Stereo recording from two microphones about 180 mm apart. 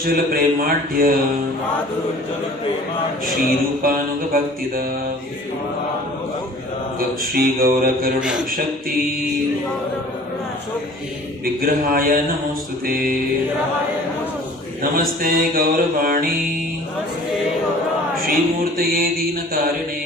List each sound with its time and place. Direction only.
0.0 s speech: 55° right (ahead or behind)
3.8 s mantra: 55° right (ahead or behind)
7.3 s mantra: 55° right (ahead or behind)
8.2 s a man's voice: 5° right (ahead or behind)
11.6 s speech: 55° right (ahead or behind)
14.9 s mantra: 55° right (ahead or behind)
18.2 s speech: 55° right (ahead or behind)